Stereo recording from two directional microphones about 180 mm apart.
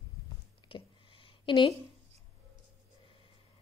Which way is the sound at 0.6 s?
30° left (ahead or behind).